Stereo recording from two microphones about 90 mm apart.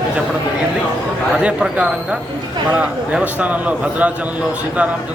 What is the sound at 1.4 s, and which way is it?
A man's voice, 15° right (ahead or behind).